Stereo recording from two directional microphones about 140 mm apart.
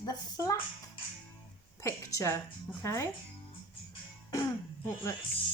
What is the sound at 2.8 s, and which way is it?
Speech, 20° left (ahead or behind).